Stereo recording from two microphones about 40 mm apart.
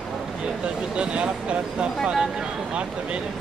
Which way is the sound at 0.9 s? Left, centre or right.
Right.